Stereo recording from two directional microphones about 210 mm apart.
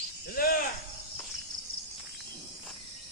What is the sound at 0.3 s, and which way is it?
Cricket, 45° left (ahead or behind).